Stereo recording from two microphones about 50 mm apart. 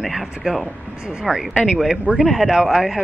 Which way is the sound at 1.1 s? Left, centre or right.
Centre.